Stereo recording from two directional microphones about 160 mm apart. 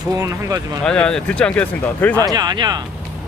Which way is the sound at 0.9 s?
5° left (ahead or behind).